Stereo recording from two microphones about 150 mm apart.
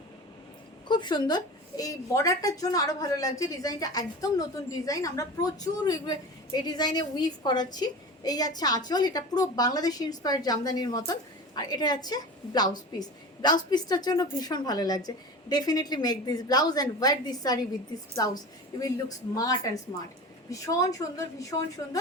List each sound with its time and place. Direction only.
0.9 s a woman's voice: 30° left (ahead or behind)